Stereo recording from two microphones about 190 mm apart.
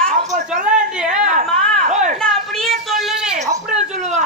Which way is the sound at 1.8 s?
40° right (ahead or behind).